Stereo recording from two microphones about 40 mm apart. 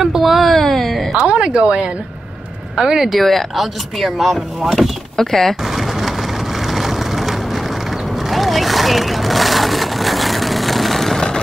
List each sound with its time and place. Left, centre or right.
0.0 s a sound: centre
1.2 s a woman's voice: right
2.8 s speech: centre
3.1 s speech: centre
6.7 s vehicle: centre